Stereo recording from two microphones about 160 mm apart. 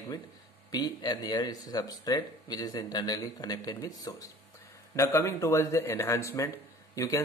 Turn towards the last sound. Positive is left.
turn(degrees=20)  # may be behind; listen again after turning